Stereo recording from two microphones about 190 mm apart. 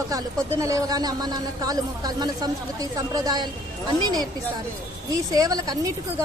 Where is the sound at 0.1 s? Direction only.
20° right (ahead or behind).